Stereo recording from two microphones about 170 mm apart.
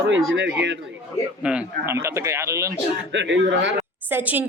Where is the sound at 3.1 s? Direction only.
90° right.